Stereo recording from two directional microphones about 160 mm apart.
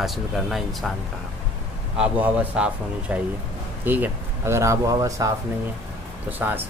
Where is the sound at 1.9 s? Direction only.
5° right (ahead or behind).